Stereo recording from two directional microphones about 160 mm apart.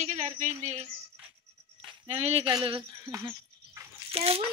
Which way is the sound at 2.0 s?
40° right (ahead or behind).